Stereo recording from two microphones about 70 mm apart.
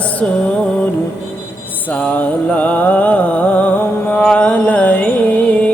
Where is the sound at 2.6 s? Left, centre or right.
Left.